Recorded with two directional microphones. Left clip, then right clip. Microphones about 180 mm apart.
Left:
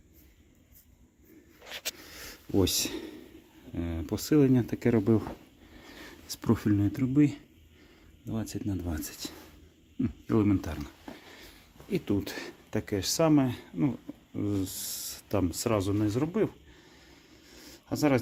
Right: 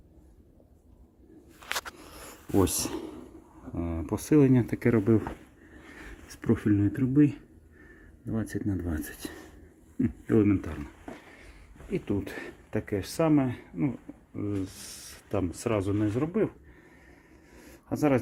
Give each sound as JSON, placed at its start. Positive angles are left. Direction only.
{"t": 2.6, "sound": "speech", "side_deg": 0}
{"t": 3.8, "sound": "a sound", "side_deg": 0}
{"t": 4.2, "sound": "speech", "side_deg": -10}
{"t": 6.2, "sound": "speech", "side_deg": 10}
{"t": 8.4, "sound": "speech", "side_deg": -15}
{"t": 11.9, "sound": "speech", "side_deg": 20}
{"t": 17.6, "sound": "a sound", "side_deg": 0}